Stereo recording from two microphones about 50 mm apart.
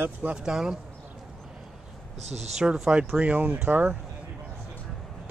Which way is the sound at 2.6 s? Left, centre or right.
Centre.